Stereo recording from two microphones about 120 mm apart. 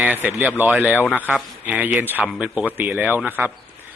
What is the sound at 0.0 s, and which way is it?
A man's voice, 15° right (ahead or behind).